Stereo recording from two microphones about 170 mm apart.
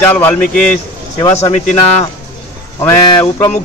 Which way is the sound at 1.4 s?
40° left (ahead or behind).